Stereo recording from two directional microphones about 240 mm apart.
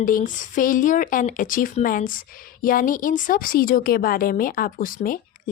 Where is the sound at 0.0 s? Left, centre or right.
Left.